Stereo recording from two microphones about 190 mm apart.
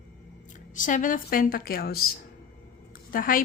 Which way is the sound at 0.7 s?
45° left (ahead or behind).